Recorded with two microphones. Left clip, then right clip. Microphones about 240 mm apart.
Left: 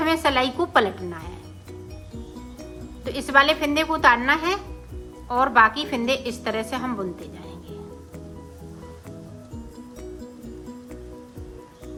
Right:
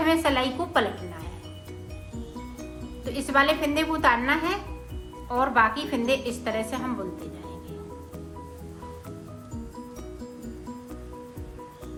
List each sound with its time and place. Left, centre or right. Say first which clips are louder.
0.0 s a woman's voice: left 2 dB; centre
3.2 s a woman's voice: left 4 dB; centre